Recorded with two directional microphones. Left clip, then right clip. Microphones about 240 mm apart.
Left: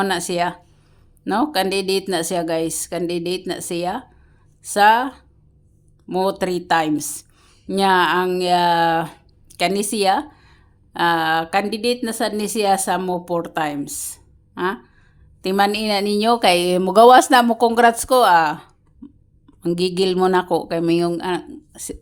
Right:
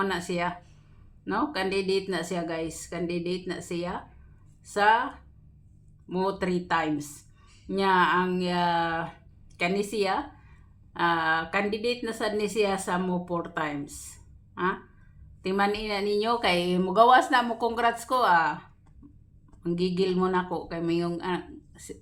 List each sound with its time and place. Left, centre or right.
0.0 s speech: left